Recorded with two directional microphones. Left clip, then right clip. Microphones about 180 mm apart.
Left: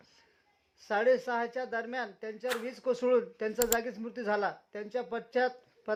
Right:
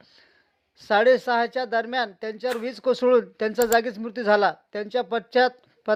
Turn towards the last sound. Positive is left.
turn(degrees=-30)  # may be behind; listen again after turning